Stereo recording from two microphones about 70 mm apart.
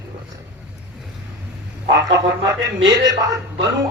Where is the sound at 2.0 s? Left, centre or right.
Right.